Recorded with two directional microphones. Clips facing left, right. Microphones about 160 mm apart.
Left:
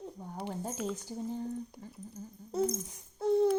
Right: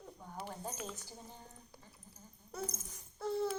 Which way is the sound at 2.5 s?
25° left (ahead or behind).